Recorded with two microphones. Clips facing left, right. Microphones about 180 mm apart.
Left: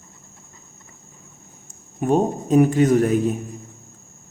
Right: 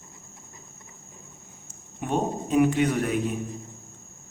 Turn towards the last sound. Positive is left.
turn(degrees=40)  # may be behind; listen again after turning